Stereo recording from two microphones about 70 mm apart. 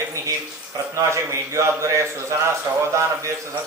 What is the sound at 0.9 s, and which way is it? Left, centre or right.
A man's voice, right.